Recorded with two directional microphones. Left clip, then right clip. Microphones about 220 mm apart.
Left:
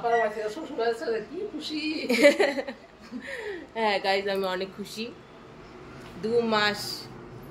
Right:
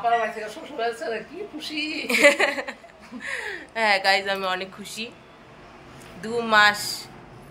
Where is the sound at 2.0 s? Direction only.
20° left (ahead or behind).